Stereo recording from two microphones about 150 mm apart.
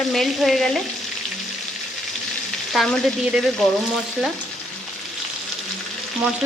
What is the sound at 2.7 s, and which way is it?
Frying, centre (ahead or behind).